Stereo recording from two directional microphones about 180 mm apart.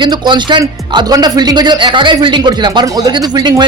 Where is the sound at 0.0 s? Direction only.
25° right (ahead or behind).